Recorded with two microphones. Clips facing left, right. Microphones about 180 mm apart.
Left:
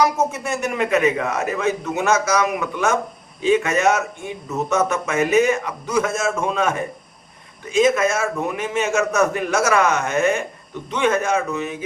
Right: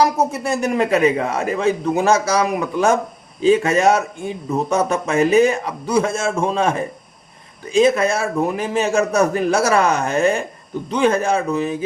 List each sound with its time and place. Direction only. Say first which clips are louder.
0.0 s a man's voice: right 2 dB; 35° right (ahead or behind)